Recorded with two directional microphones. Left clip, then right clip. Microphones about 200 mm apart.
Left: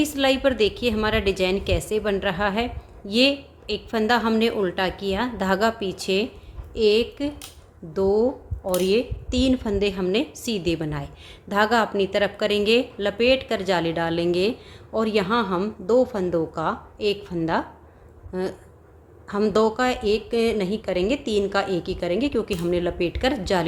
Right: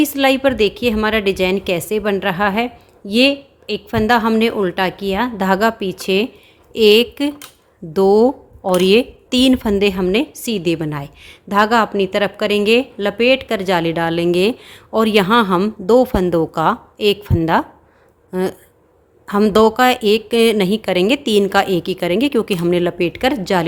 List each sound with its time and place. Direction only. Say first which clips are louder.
0.0 s speech: right 6 dB; 30° right (ahead or behind)
6.7 s speech: right 8 dB; 45° right (ahead or behind)